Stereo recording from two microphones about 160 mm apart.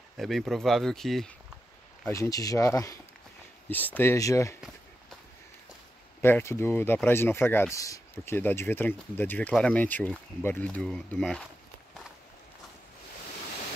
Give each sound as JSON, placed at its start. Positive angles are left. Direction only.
{"t": 0.2, "sound": "speech", "side_deg": 0}
{"t": 2.0, "sound": "speech", "side_deg": 20}
{"t": 6.2, "sound": "speech", "side_deg": 15}